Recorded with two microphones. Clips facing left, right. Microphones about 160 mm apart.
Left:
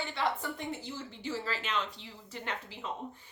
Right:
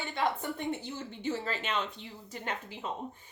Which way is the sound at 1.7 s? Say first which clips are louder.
Right 1 dB; 50° right (ahead or behind).